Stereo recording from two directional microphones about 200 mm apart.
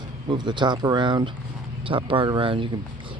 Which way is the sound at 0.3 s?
20° right (ahead or behind).